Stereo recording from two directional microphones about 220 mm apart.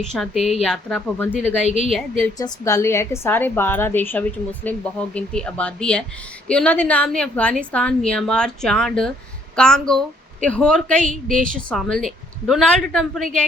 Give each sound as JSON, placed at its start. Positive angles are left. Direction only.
{"t": 0.0, "sound": "a woman's voice", "side_deg": 0}
{"t": 2.4, "sound": "a woman's voice", "side_deg": 15}